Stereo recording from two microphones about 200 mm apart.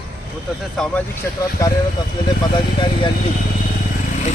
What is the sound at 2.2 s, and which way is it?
Speech, 20° left (ahead or behind).